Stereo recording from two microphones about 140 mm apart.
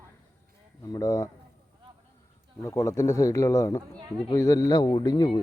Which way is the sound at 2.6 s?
20° left (ahead or behind).